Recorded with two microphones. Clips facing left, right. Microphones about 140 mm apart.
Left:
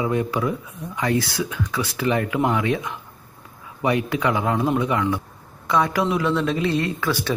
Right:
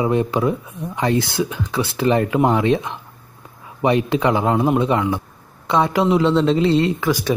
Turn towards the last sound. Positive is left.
turn(degrees=-15)  # may be behind; listen again after turning